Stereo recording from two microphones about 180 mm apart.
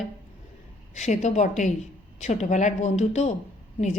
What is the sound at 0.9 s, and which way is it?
A woman's voice, 40° left (ahead or behind).